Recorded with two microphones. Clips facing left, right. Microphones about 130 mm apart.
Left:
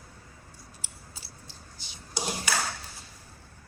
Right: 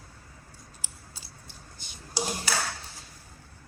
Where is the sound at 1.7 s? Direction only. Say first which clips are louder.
Even; 50° right (ahead or behind).